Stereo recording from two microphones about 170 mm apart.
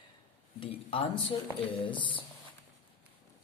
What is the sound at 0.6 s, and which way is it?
A man's voice, 30° left (ahead or behind).